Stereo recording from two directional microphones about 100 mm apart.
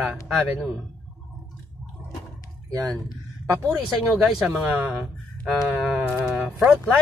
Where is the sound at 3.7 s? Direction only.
5° right (ahead or behind).